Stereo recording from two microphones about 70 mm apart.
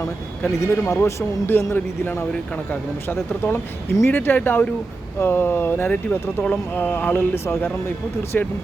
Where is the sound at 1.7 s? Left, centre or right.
Left.